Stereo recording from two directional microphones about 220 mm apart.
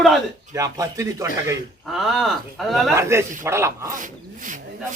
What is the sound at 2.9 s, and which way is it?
A man's voice, 10° right (ahead or behind).